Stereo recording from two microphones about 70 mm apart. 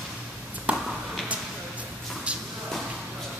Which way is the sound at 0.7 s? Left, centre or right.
Centre.